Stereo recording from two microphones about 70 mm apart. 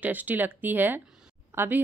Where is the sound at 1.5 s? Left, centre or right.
Right.